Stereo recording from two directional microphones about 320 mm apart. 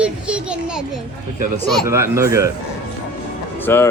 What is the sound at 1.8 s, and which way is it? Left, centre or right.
Speech, centre.